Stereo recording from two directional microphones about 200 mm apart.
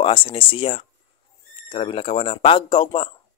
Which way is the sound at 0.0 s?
25° left (ahead or behind).